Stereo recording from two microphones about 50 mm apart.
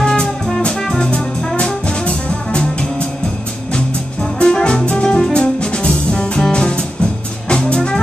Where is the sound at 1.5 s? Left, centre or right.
Centre.